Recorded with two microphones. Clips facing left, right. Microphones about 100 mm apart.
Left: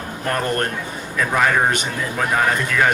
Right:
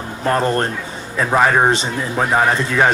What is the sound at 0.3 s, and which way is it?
A man's voice, 25° right (ahead or behind).